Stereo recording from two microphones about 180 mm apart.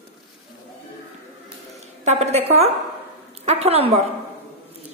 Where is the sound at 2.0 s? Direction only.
35° right (ahead or behind).